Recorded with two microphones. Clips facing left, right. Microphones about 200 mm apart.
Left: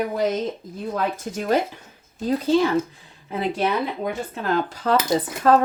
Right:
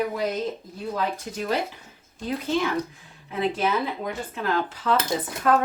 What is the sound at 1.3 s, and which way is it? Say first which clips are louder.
Speech: left 5 dB; 45° left (ahead or behind).